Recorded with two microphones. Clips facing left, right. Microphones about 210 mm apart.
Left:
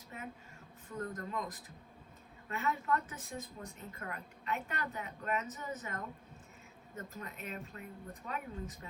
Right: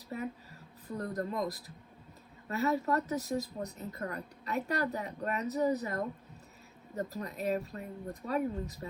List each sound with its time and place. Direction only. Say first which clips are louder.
0.1 s a woman's voice: right 9 dB; 35° right (ahead or behind)